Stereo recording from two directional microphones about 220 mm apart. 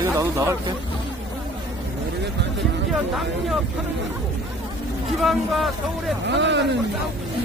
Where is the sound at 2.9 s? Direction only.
Centre (ahead or behind).